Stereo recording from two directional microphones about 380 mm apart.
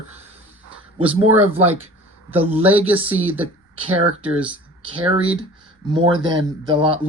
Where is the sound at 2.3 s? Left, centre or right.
Centre.